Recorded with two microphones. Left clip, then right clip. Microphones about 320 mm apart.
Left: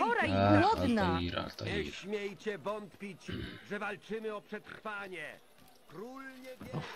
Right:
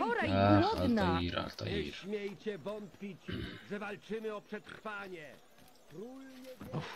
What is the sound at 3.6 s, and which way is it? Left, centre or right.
Speech, centre.